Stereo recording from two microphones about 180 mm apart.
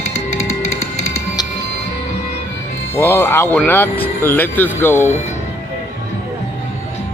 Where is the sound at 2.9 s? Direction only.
15° left (ahead or behind).